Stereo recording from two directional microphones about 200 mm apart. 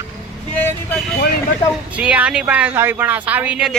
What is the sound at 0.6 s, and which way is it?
Vehicle, 10° left (ahead or behind).